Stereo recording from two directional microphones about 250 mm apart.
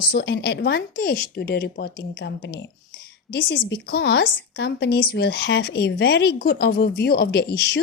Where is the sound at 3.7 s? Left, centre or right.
Left.